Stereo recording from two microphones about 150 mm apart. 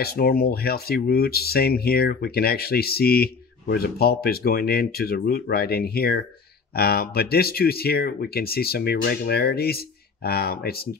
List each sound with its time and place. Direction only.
0.0 s speech: 90° left